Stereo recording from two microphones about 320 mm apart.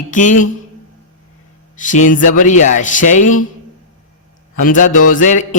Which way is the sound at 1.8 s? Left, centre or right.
Left.